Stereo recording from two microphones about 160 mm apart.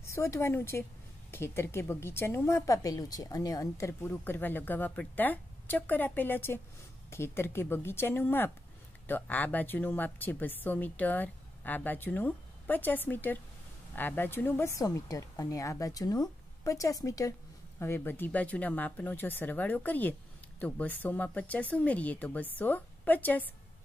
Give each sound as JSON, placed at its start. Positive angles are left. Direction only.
{"t": 0.0, "sound": "speech", "side_deg": 15}